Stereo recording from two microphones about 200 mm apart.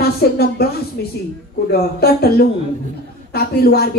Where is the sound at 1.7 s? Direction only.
50° left (ahead or behind).